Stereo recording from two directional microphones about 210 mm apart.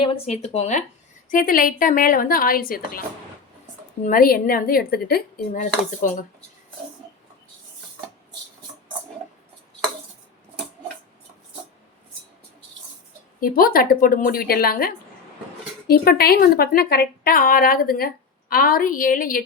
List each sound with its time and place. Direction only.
0.0 s a woman's voice: 30° left (ahead or behind); by 3.0 s 45° left (ahead or behind)
4.0 s speech: 40° left (ahead or behind)
13.4 s speech: 45° left (ahead or behind)